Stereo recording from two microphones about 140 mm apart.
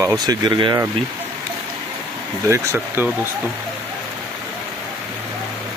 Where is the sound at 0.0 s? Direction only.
25° right (ahead or behind).